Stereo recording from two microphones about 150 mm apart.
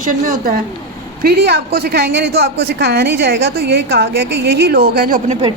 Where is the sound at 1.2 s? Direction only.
90° right; by 5.1 s 75° right (ahead or behind).